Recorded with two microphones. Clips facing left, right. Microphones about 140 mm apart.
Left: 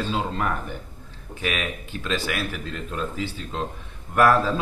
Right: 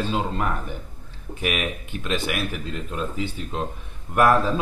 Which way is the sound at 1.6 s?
15° right (ahead or behind).